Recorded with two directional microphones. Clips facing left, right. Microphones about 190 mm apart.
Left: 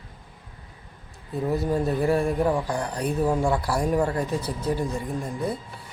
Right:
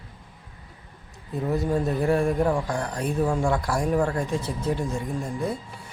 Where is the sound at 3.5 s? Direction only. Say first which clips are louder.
Even; 5° left (ahead or behind).